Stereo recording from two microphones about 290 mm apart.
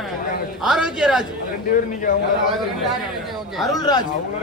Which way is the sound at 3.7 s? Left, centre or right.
Centre.